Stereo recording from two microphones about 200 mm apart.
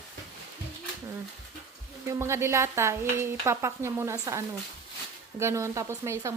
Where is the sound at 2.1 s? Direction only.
15° right (ahead or behind).